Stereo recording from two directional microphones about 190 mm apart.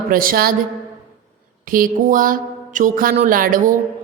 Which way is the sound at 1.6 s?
45° right (ahead or behind).